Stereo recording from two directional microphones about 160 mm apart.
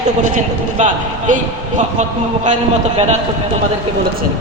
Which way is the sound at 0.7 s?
50° right (ahead or behind).